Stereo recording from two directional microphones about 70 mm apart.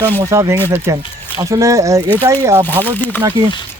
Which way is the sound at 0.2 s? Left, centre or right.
Right.